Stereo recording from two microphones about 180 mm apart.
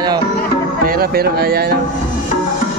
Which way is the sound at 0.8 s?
55° right (ahead or behind).